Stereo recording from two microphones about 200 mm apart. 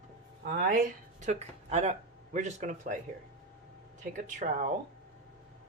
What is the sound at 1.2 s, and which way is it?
Speech, 35° right (ahead or behind).